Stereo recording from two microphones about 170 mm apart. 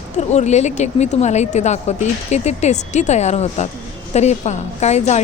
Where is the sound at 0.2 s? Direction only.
40° left (ahead or behind).